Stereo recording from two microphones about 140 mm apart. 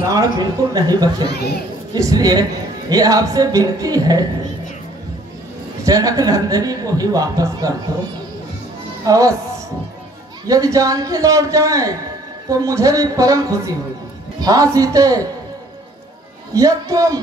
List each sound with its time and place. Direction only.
0.1 s speech: 25° right (ahead or behind)
5.9 s speech: 25° right (ahead or behind)
9.0 s speech: 25° right (ahead or behind)
10.4 s speech: 25° right (ahead or behind)
16.5 s speech: 25° right (ahead or behind)